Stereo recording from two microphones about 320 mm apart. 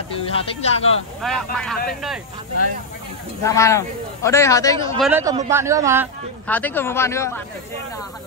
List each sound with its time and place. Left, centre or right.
0.3 s a man's voice: centre
1.2 s speech: centre
3.4 s a man's voice: centre
5.0 s a man's voice: centre
6.4 s a man's voice: centre